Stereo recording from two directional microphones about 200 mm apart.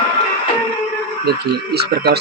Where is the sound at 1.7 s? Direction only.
55° right (ahead or behind).